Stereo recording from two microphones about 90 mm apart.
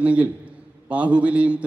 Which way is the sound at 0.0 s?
15° right (ahead or behind).